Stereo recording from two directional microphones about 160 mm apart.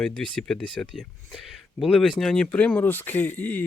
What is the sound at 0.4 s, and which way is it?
Speech, 5° left (ahead or behind).